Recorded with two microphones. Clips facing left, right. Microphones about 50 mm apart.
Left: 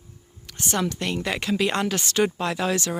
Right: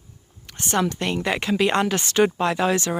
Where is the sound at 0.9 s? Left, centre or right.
Right.